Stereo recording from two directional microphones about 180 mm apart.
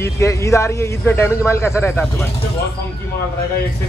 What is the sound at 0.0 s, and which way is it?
A man's voice, 15° left (ahead or behind).